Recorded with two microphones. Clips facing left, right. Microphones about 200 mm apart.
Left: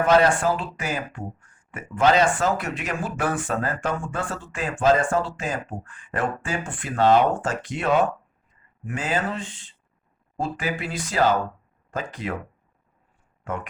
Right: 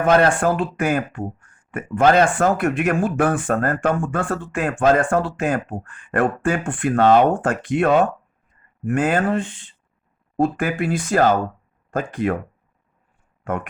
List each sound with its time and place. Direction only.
0.0 s speech: 55° right (ahead or behind)
13.4 s speech: 55° right (ahead or behind)